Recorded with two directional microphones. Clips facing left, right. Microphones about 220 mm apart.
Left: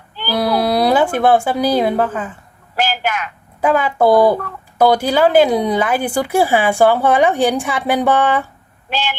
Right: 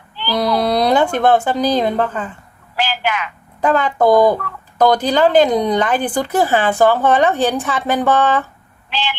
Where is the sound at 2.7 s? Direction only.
45° left (ahead or behind).